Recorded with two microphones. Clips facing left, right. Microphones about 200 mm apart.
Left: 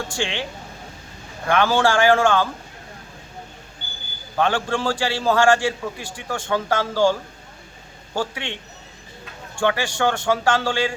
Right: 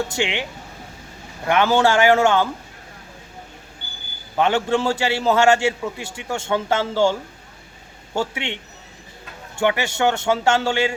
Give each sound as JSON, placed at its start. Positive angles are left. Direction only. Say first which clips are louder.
{"t": 0.1, "sound": "a man's voice", "louder": "right 2 dB", "side_deg": -20}
{"t": 1.5, "sound": "a man's voice", "louder": "right 2 dB", "side_deg": -20}
{"t": 4.4, "sound": "a man's voice", "louder": "right 3 dB", "side_deg": -20}
{"t": 9.6, "sound": "a man's voice", "louder": "right 1 dB", "side_deg": -20}